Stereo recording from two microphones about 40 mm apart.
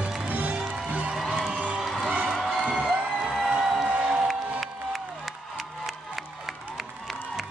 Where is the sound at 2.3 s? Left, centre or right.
Centre.